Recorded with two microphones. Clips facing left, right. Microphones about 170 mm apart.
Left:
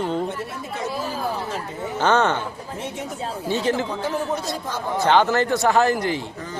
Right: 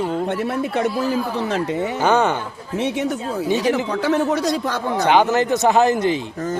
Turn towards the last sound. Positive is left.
turn(degrees=-20)  # may be behind; listen again after turning